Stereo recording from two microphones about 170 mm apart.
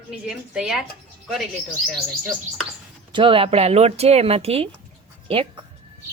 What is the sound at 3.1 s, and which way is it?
Speech, 30° right (ahead or behind).